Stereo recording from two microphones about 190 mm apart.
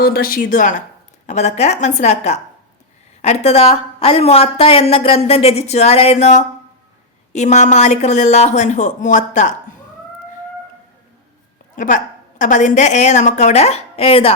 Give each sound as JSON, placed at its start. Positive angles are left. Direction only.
{"t": 0.0, "sound": "a woman's voice", "side_deg": 50}
{"t": 11.8, "sound": "a woman's voice", "side_deg": 40}